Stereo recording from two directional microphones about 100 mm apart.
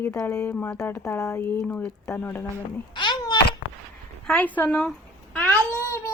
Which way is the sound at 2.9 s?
50° left (ahead or behind).